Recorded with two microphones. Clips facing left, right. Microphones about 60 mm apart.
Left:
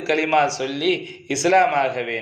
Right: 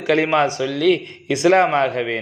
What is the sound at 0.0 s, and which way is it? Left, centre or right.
A man's voice, right.